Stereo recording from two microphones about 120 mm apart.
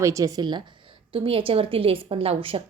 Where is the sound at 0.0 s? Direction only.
25° right (ahead or behind).